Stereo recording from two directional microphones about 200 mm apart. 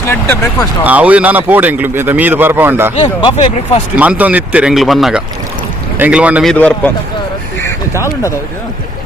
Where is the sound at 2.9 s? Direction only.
30° left (ahead or behind).